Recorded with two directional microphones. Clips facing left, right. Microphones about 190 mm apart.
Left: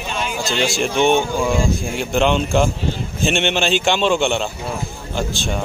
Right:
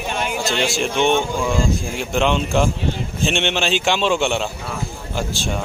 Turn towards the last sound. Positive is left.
turn(degrees=-5)  # may be behind; listen again after turning